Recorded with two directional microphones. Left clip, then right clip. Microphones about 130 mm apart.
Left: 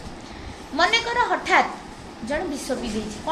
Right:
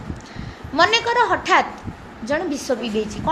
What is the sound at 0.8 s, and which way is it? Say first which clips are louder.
A woman's voice: right 4 dB; 65° right (ahead or behind).